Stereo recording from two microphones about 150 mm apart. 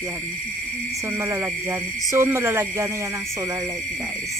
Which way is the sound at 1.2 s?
20° right (ahead or behind).